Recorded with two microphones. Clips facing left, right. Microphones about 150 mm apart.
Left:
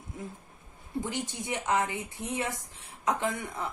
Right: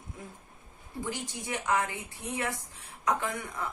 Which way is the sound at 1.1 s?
20° left (ahead or behind).